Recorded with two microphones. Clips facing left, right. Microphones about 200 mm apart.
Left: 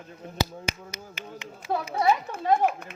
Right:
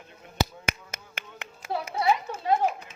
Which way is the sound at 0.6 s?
55° right (ahead or behind).